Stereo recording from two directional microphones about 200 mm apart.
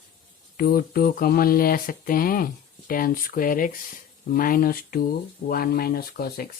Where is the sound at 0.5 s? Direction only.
45° left (ahead or behind).